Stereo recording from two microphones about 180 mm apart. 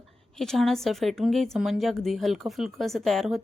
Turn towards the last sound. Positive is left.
turn(degrees=0)  # may be behind; listen again after turning